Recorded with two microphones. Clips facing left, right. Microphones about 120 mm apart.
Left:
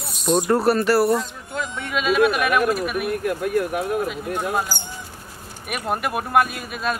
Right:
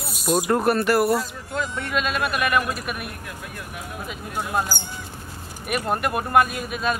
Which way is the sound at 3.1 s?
55° left (ahead or behind).